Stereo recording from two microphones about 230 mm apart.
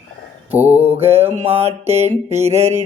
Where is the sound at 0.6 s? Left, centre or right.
Centre.